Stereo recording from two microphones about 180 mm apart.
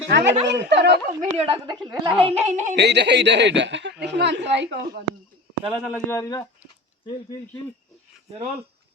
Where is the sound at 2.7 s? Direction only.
70° right (ahead or behind).